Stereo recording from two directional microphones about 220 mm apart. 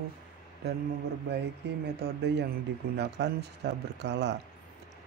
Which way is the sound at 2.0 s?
50° right (ahead or behind).